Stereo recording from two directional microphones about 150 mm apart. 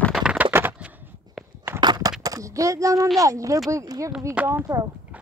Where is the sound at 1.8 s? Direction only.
30° right (ahead or behind).